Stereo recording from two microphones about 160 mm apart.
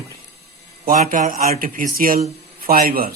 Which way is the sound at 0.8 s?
60° right (ahead or behind).